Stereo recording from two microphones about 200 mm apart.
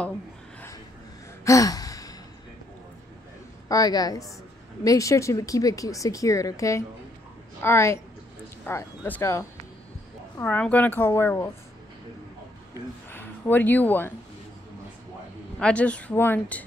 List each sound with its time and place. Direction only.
1.4 s gasp: 15° left (ahead or behind)
3.6 s a woman's voice: 20° left (ahead or behind)
13.1 s speech: 10° left (ahead or behind)
15.6 s speech: 5° left (ahead or behind)